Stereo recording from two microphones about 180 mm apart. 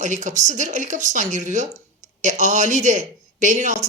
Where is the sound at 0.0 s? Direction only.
45° right (ahead or behind).